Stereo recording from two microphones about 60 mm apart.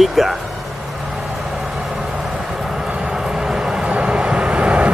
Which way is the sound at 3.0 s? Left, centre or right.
Centre.